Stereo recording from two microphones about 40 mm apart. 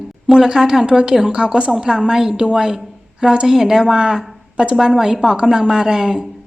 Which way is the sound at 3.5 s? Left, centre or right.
Centre.